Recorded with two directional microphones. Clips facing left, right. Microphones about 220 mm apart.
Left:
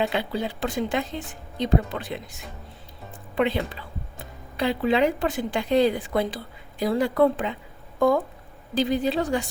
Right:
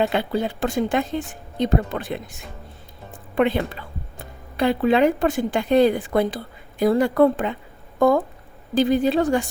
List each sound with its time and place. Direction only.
0.1 s speech: 50° right (ahead or behind)
3.3 s speech: 50° right (ahead or behind)